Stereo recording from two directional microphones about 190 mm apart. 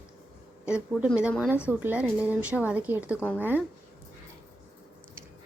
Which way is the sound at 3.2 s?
10° left (ahead or behind).